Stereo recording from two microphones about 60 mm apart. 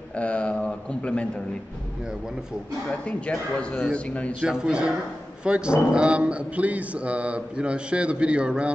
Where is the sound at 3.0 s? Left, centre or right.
Centre.